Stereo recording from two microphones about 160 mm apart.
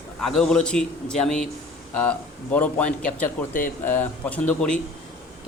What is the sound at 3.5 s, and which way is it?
Speech, 60° left (ahead or behind).